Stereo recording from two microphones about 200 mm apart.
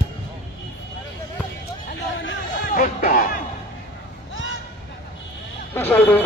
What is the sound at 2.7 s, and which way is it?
Music, 40° left (ahead or behind).